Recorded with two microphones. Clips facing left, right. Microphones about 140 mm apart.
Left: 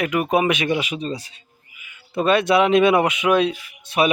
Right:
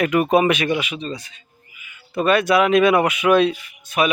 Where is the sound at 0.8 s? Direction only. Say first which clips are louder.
Left 2 dB; 35° left (ahead or behind).